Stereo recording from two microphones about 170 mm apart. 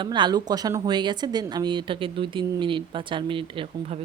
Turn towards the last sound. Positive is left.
turn(degrees=-30)  # may be behind; listen again after turning